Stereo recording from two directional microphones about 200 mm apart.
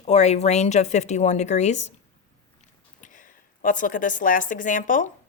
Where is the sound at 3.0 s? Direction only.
40° left (ahead or behind).